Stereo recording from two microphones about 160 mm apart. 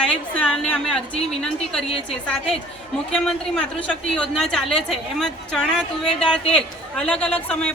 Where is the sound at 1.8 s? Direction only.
35° left (ahead or behind).